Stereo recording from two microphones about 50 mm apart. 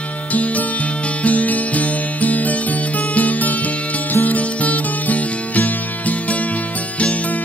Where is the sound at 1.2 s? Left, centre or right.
Left.